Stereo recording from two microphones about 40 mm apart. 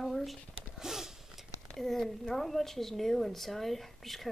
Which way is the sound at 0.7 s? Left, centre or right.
Centre.